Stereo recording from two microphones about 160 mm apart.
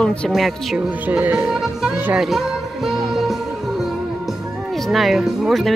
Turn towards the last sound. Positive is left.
turn(degrees=0)  # may be behind; listen again after turning